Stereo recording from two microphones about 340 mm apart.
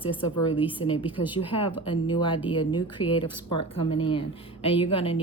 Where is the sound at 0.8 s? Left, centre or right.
Centre.